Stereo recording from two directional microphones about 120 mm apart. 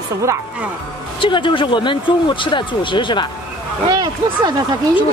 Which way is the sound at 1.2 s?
45° left (ahead or behind).